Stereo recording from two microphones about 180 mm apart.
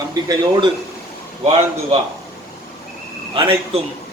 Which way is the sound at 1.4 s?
35° right (ahead or behind).